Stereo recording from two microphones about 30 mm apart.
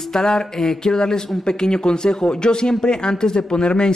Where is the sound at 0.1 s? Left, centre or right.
Left.